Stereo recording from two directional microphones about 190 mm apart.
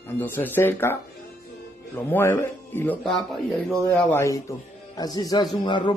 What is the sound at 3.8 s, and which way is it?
Speech, 10° left (ahead or behind).